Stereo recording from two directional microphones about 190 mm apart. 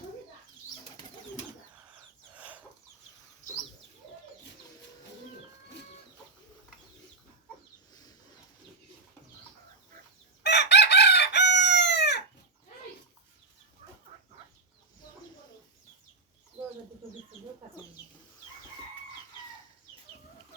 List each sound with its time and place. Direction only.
2.3 s chicken: 5° right (ahead or behind)
10.4 s chicken: 65° left (ahead or behind)
13.8 s chicken: 35° right (ahead or behind)